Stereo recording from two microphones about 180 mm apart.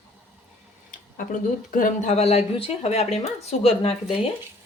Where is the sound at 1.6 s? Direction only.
50° left (ahead or behind); by 4.0 s 35° left (ahead or behind).